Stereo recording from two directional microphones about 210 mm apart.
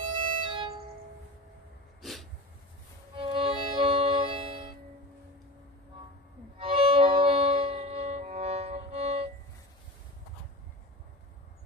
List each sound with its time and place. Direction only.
0.1 s music: 25° right (ahead or behind)
2.0 s a sound: centre (ahead or behind)
3.2 s violin: 25° right (ahead or behind)
6.6 s violin: 25° right (ahead or behind)